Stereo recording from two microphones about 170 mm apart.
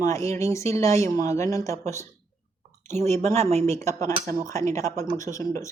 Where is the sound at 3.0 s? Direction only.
40° right (ahead or behind).